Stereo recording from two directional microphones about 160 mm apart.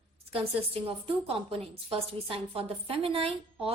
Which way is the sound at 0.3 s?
35° right (ahead or behind).